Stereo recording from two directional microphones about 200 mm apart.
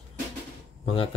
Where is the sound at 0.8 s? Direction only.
30° left (ahead or behind).